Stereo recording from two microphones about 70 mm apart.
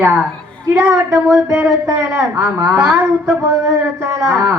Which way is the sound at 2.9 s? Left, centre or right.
Right.